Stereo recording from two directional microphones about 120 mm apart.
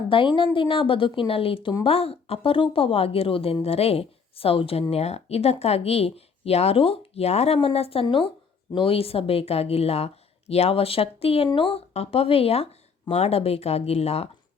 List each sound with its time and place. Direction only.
0.1 s a woman's voice: 45° left (ahead or behind)